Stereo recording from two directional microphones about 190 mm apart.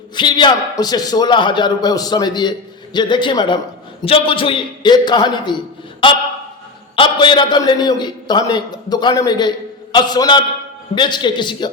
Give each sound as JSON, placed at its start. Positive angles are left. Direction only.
{"t": 0.2, "sound": "a man's voice", "side_deg": 25}
{"t": 6.9, "sound": "a man's voice", "side_deg": 25}